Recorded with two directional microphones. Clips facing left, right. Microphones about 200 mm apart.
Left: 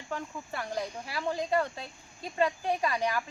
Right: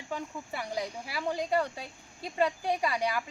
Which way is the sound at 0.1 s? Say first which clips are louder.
Even; 10° right (ahead or behind).